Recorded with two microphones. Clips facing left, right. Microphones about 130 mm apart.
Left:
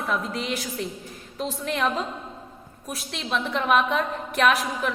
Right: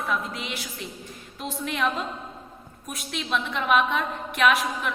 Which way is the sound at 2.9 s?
35° left (ahead or behind).